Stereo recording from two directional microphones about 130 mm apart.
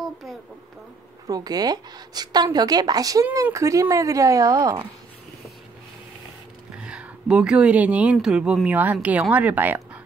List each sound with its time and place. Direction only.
0.0 s a sound: centre (ahead or behind)
1.2 s a woman's voice: 30° right (ahead or behind)
6.8 s speech: 10° right (ahead or behind)